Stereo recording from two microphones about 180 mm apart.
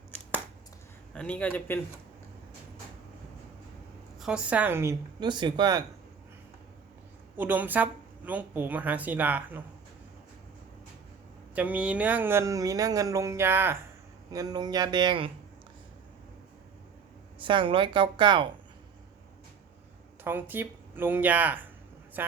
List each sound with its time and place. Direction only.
1.1 s a man's voice: 5° left (ahead or behind)
4.2 s speech: 5° right (ahead or behind); by 5.8 s 25° right (ahead or behind)
7.3 s speech: 10° right (ahead or behind)
11.5 s a man's voice: 5° right (ahead or behind); by 15.3 s 25° right (ahead or behind)
17.4 s a man's voice: 25° right (ahead or behind)
20.2 s speech: 10° right (ahead or behind)